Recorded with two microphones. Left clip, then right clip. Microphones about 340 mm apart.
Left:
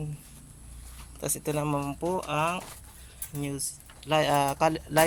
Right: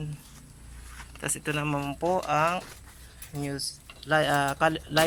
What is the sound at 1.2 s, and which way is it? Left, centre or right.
Speech, centre.